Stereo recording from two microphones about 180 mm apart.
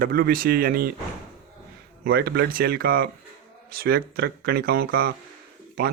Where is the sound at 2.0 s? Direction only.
60° right (ahead or behind).